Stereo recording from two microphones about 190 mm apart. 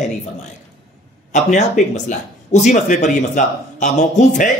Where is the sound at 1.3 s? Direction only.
40° left (ahead or behind).